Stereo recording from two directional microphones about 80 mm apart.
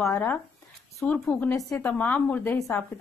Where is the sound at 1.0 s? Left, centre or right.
Centre.